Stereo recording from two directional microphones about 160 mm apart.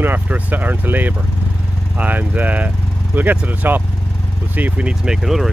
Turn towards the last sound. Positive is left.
turn(degrees=0)  # may be behind; listen again after turning